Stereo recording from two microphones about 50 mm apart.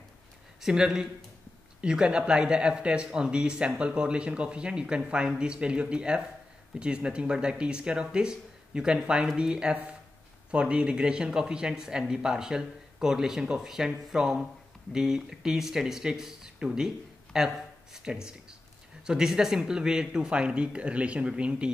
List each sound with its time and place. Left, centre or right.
0.6 s speech: centre